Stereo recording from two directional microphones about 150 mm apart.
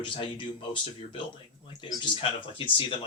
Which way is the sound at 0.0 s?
35° left (ahead or behind).